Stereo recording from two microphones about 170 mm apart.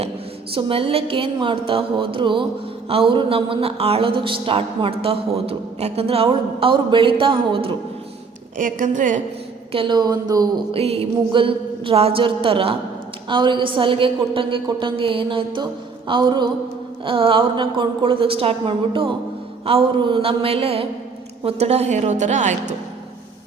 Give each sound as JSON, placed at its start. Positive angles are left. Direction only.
{"t": 0.5, "sound": "speech", "side_deg": -35}
{"t": 8.5, "sound": "a woman's voice", "side_deg": -50}
{"t": 9.7, "sound": "a woman's voice", "side_deg": -25}
{"t": 10.7, "sound": "a woman's voice", "side_deg": -35}